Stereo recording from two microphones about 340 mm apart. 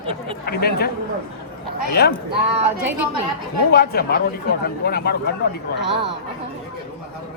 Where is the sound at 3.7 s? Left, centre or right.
Left.